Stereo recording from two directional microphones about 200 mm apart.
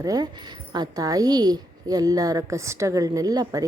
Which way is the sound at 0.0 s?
20° right (ahead or behind).